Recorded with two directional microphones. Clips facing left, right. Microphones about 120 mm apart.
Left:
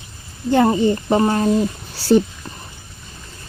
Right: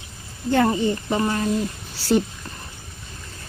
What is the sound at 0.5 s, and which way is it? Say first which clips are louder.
Speech: left 4 dB; 25° left (ahead or behind).